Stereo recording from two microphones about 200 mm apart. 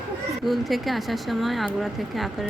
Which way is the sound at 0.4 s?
Centre (ahead or behind).